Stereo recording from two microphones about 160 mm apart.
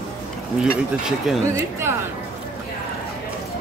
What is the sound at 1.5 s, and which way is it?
Speech, 15° right (ahead or behind).